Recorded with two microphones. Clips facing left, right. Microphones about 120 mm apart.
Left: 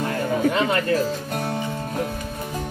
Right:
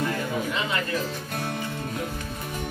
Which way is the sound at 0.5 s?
55° left (ahead or behind).